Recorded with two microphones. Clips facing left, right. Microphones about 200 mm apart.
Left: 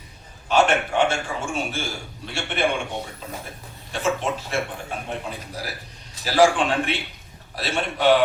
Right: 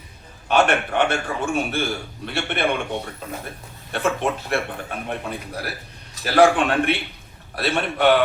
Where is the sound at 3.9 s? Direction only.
60° right (ahead or behind).